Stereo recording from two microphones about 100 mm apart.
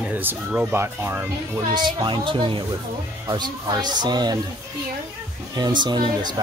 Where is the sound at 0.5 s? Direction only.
10° right (ahead or behind).